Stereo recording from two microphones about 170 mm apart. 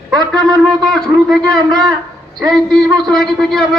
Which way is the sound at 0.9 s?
Centre (ahead or behind).